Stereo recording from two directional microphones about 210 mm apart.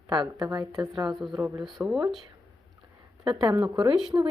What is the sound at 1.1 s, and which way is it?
Speech, centre (ahead or behind).